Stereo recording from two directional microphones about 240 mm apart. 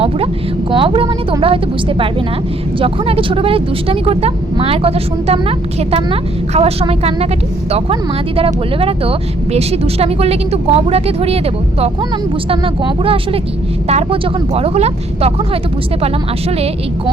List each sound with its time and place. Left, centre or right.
0.7 s speech: right
8.4 s speech: right
12.5 s speech: right